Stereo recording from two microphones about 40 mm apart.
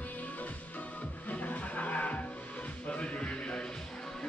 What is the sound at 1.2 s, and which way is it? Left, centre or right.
Music, left.